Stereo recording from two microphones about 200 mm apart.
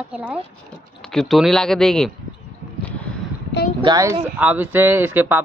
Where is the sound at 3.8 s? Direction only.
15° right (ahead or behind).